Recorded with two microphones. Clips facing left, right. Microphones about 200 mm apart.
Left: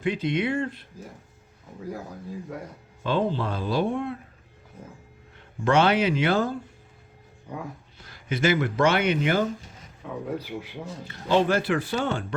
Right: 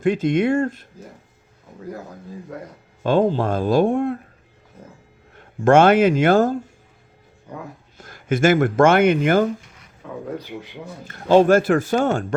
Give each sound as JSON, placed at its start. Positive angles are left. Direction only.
{"t": 0.0, "sound": "speech", "side_deg": -45}
{"t": 3.0, "sound": "speech", "side_deg": -45}
{"t": 5.6, "sound": "speech", "side_deg": -50}
{"t": 7.9, "sound": "speech", "side_deg": -50}
{"t": 11.0, "sound": "speech", "side_deg": -50}